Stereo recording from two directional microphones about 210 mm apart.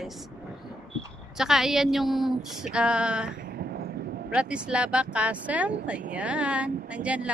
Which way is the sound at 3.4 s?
45° right (ahead or behind).